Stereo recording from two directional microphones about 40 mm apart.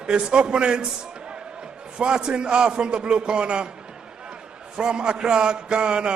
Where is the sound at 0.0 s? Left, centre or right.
Right.